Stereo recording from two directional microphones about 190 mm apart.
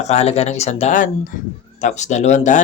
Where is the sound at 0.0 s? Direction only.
35° left (ahead or behind).